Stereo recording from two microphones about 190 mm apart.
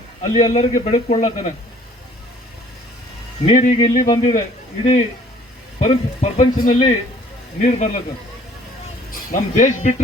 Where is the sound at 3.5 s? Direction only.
40° left (ahead or behind).